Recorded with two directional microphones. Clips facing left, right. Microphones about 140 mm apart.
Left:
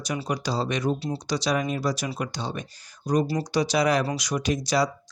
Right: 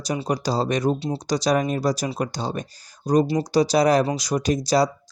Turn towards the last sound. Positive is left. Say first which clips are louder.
# right 4 dB
turn(degrees=-35)  # may be behind; listen again after turning